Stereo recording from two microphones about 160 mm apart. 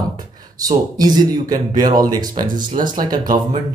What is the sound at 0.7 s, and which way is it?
Speech, 25° right (ahead or behind).